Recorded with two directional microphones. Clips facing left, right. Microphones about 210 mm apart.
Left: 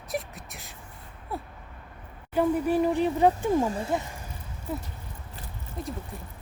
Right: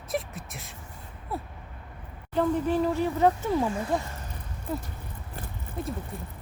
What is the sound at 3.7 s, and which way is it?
Speech, 30° left (ahead or behind).